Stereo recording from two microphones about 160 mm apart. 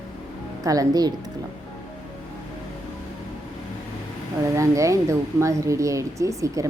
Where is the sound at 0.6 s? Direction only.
20° right (ahead or behind).